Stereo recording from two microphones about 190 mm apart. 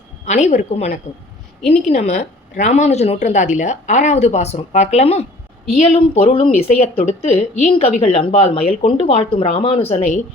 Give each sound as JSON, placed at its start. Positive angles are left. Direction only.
{"t": 0.3, "sound": "a woman's voice", "side_deg": 35}
{"t": 6.2, "sound": "a woman's voice", "side_deg": 30}